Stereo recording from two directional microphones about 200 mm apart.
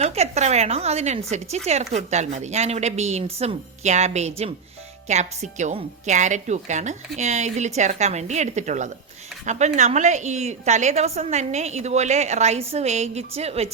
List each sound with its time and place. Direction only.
0.0 s a woman's voice: 30° right (ahead or behind)